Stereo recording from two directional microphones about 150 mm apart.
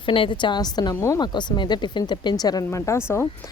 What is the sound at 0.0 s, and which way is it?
A woman's voice, 35° left (ahead or behind).